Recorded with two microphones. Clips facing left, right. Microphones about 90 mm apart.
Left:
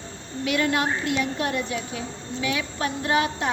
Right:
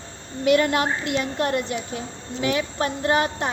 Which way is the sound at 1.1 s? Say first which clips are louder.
Right 2 dB; 50° right (ahead or behind).